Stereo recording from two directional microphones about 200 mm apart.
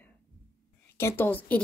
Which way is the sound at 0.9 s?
10° left (ahead or behind).